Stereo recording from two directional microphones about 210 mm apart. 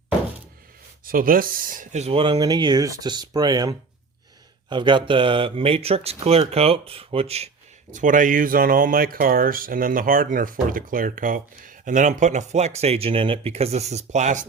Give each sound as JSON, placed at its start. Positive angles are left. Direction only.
{"t": 1.0, "sound": "speech", "side_deg": -45}